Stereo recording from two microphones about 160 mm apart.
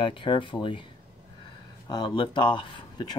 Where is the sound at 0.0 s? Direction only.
30° left (ahead or behind).